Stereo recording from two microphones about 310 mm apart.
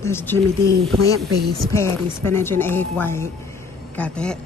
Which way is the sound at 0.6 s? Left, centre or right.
Right.